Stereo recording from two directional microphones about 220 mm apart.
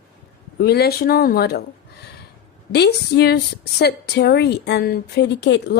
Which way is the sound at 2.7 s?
50° left (ahead or behind).